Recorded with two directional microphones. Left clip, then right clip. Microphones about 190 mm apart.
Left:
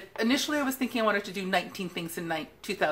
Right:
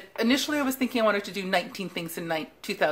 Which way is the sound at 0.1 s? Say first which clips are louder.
Right 2 dB; 35° right (ahead or behind).